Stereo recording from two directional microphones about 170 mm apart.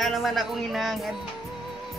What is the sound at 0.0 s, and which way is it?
Speech, centre (ahead or behind).